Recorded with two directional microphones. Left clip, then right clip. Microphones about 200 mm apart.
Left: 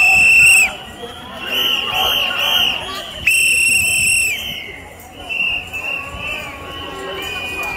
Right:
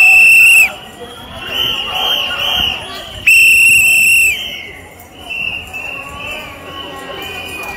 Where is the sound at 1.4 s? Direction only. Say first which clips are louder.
Right 1 dB; 60° left (ahead or behind).